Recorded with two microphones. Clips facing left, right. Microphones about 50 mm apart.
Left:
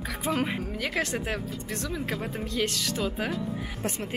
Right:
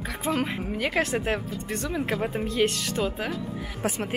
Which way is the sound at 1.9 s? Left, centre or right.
Centre.